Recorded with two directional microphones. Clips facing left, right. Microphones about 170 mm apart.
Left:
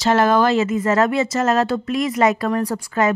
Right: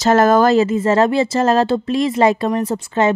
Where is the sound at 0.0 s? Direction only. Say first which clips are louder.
Right 4 dB; 45° right (ahead or behind).